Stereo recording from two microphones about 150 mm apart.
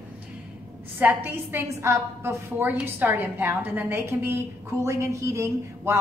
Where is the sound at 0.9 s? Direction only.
15° right (ahead or behind).